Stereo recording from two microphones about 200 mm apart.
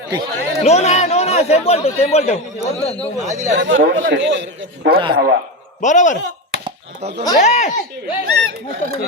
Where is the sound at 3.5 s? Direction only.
65° right (ahead or behind).